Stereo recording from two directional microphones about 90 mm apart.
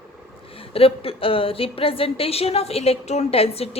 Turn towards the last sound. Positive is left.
turn(degrees=90)